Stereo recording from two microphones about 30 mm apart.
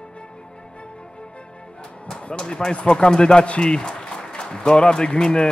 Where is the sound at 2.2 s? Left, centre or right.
Left.